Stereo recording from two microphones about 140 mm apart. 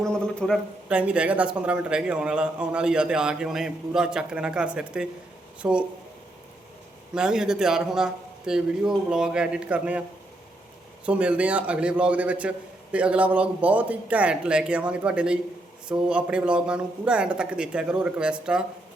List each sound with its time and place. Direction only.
0.1 s a sound: 5° left (ahead or behind)
0.9 s a man's voice: 10° right (ahead or behind)
7.1 s a man's voice: 5° right (ahead or behind)
11.0 s a man's voice: 10° right (ahead or behind)